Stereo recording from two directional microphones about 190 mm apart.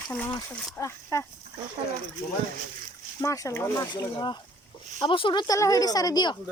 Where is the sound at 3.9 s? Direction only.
25° left (ahead or behind).